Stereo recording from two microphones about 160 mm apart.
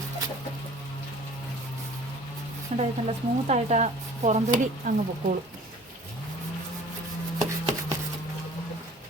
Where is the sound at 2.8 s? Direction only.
45° right (ahead or behind).